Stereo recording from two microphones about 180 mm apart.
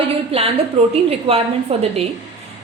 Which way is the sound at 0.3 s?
30° right (ahead or behind).